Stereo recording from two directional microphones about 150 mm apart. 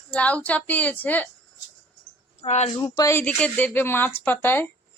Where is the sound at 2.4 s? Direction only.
45° left (ahead or behind).